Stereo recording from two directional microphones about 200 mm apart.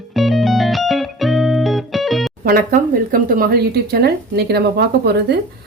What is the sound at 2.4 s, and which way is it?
A woman's voice, 45° right (ahead or behind).